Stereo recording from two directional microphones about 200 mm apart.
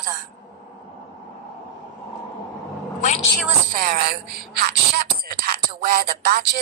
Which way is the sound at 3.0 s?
35° left (ahead or behind).